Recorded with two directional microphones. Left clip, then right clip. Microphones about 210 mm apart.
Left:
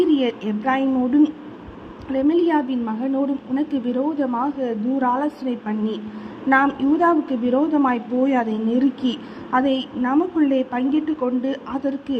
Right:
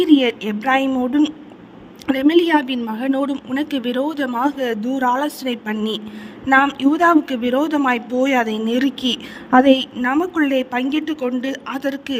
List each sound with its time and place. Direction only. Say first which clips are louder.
0.0 s a woman's voice: right 4 dB; 50° right (ahead or behind)